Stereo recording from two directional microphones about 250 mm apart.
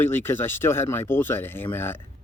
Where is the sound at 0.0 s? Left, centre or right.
Centre.